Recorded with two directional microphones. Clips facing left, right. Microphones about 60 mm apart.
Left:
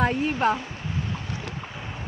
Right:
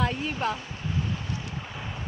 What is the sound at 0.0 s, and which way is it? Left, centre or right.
Speech, left.